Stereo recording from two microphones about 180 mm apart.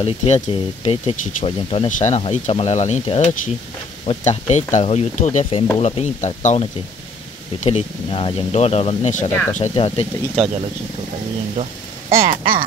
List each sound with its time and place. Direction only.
0.0 s speech: 35° left (ahead or behind)
10.4 s speech: centre (ahead or behind)
12.1 s speech: 50° right (ahead or behind)